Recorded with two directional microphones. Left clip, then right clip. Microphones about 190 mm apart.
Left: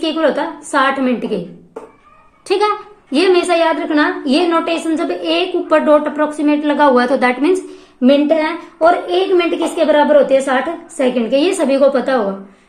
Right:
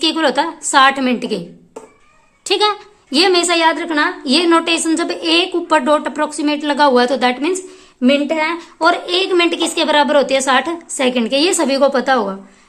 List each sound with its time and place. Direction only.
0.0 s a woman's voice: 30° right (ahead or behind)
2.5 s a woman's voice: 25° right (ahead or behind)